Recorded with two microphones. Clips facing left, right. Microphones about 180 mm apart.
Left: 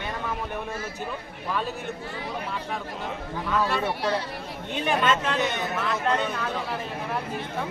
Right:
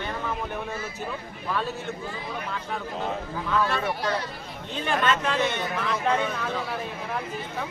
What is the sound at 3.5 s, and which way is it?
Speech, 5° left (ahead or behind).